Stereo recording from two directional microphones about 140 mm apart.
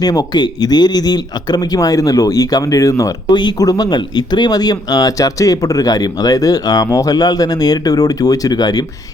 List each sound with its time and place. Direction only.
0.0 s speech: 30° left (ahead or behind)